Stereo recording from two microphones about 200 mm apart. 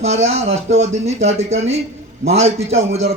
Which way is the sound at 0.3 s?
30° right (ahead or behind).